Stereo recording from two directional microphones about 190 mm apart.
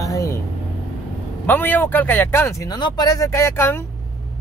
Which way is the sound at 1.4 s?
10° left (ahead or behind).